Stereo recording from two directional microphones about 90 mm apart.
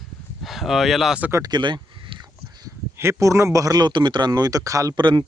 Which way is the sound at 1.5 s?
60° right (ahead or behind).